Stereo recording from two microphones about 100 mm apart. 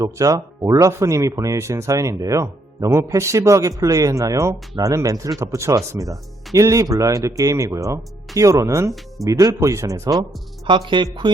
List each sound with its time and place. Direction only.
0.2 s speech: 35° right (ahead or behind)
10.7 s speech: 55° right (ahead or behind)